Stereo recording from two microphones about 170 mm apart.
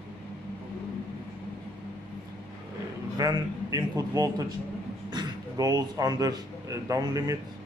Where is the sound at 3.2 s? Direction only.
20° right (ahead or behind).